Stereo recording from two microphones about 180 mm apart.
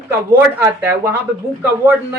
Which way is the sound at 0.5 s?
10° right (ahead or behind).